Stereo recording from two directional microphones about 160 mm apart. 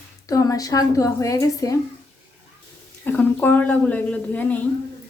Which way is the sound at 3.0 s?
10° left (ahead or behind).